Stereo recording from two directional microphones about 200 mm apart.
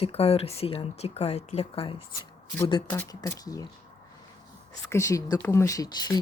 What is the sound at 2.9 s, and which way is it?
Speech, 15° left (ahead or behind).